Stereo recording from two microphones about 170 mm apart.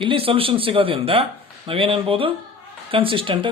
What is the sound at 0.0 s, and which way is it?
Speech, 30° right (ahead or behind).